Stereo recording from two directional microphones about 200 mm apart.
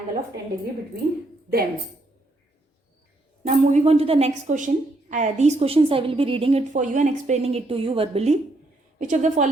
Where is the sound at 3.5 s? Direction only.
35° right (ahead or behind).